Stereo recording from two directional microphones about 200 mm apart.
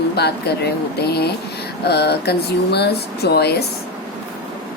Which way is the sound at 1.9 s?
55° left (ahead or behind).